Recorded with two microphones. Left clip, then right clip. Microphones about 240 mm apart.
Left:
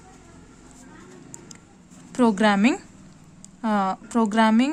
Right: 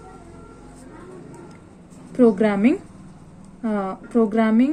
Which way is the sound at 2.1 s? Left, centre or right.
Left.